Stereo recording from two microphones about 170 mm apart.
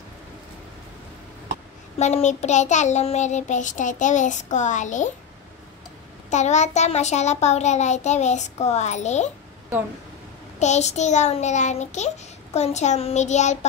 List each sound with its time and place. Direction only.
2.0 s a child's voice: 40° left (ahead or behind)
6.3 s a child's voice: 45° left (ahead or behind)
10.6 s a child's voice: 40° left (ahead or behind)